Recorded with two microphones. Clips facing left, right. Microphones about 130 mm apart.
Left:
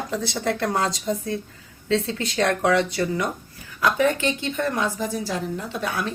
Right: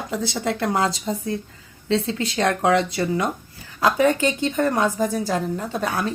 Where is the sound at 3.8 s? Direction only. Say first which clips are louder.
Right 3 dB; 35° right (ahead or behind).